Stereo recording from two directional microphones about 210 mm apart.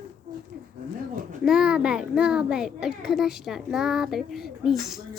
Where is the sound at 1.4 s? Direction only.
5° right (ahead or behind).